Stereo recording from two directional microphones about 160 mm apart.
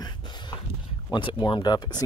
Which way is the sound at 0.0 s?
30° left (ahead or behind).